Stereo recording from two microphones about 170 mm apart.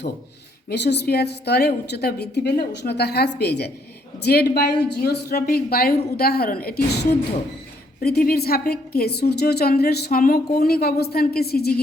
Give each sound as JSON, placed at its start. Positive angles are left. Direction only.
{"t": 0.7, "sound": "a woman's voice", "side_deg": 80}